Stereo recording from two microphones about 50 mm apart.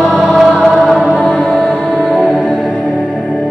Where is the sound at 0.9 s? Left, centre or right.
Centre.